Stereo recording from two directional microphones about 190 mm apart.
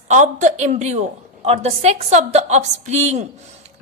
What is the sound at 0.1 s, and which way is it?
A woman's voice, 40° right (ahead or behind).